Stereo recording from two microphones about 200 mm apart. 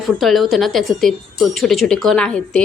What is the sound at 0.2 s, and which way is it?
A woman's voice, centre (ahead or behind).